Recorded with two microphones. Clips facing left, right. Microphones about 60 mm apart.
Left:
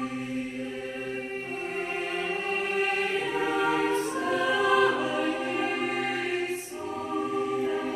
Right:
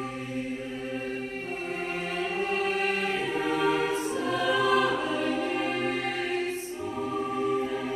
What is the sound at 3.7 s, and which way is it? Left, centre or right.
Choir, centre.